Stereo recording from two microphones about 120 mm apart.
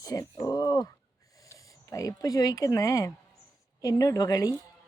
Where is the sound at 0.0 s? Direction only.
30° left (ahead or behind).